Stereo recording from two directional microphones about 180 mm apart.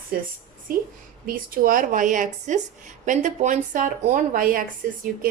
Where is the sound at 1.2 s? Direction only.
50° right (ahead or behind).